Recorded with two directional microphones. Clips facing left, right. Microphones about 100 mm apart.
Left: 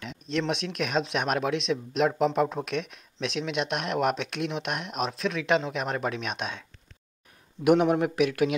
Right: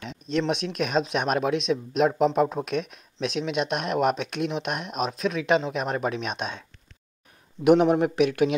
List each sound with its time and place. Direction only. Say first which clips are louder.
0.0 s speech: right 3 dB; 25° right (ahead or behind)
7.6 s speech: right 3 dB; 25° right (ahead or behind)